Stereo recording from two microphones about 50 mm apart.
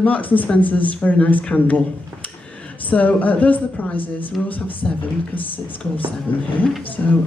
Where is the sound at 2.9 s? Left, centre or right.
Left.